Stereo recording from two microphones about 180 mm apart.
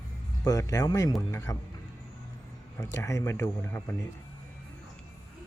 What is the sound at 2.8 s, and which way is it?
Speech, 15° left (ahead or behind).